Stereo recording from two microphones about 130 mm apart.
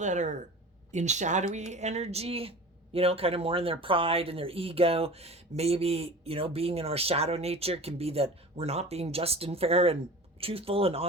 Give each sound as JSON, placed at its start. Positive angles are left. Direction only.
{"t": 0.0, "sound": "speech", "side_deg": -65}